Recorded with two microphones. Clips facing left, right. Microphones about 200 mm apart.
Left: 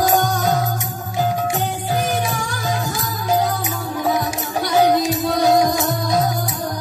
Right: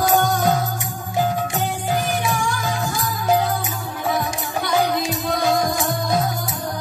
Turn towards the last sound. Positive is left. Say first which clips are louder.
# left 2 dB
turn(degrees=40)  # may be behind; listen again after turning